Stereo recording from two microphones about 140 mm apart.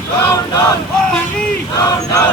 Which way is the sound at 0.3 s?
25° left (ahead or behind).